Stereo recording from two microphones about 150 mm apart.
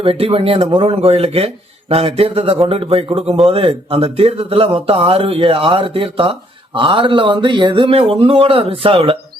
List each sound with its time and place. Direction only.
0.0 s a man's voice: 40° right (ahead or behind)